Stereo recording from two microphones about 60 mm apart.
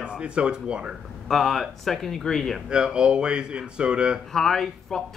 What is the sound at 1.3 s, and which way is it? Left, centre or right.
Speech, centre.